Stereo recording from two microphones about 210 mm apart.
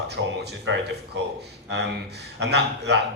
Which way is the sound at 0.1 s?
55° right (ahead or behind).